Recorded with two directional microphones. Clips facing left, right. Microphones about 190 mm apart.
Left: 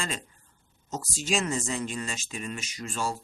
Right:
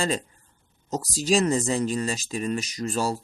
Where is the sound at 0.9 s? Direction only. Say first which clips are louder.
Right 7 dB; 35° right (ahead or behind).